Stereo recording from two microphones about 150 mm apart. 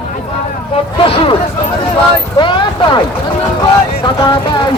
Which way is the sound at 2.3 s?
30° left (ahead or behind).